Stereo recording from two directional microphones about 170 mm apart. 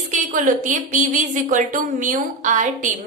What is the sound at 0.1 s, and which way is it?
Speech, 50° right (ahead or behind).